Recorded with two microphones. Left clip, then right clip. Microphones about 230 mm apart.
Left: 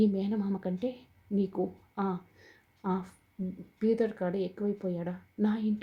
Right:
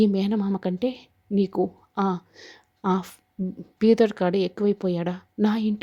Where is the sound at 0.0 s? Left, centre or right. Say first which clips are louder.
Right 7 dB; right.